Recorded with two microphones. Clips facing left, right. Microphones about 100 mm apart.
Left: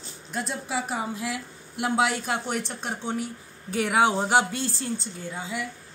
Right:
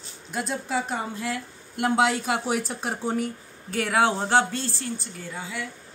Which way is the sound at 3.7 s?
15° left (ahead or behind).